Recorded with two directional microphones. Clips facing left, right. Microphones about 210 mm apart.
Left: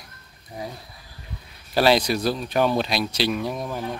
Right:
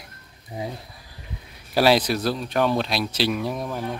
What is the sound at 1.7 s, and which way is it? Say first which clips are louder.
Speech: even; 5° right (ahead or behind).